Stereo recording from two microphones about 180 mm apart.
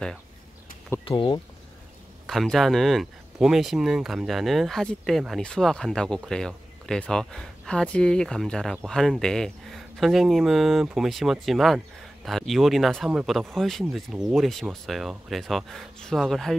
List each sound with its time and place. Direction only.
1.0 s speech: 30° left (ahead or behind)
2.2 s speech: centre (ahead or behind)